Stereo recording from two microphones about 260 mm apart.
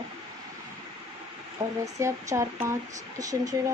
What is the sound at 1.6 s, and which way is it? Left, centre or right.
Speech, centre.